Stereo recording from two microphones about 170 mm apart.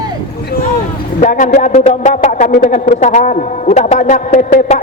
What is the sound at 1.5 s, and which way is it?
A man's voice, 40° left (ahead or behind).